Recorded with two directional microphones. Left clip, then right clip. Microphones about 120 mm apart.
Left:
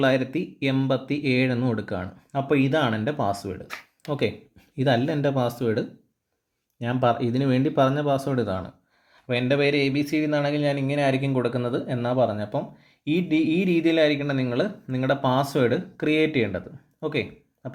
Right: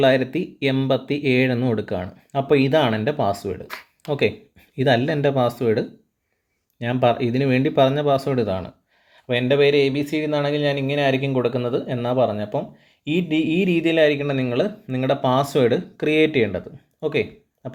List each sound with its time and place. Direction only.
0.0 s speech: 50° right (ahead or behind)
2.7 s speech: 35° right (ahead or behind)
3.0 s speech: 50° right (ahead or behind)
4.8 s speech: 20° right (ahead or behind)
6.9 s speech: 45° right (ahead or behind)
17.1 s a sound: 45° right (ahead or behind)